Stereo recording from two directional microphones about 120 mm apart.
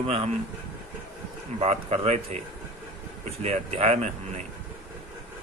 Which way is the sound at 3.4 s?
65° right (ahead or behind).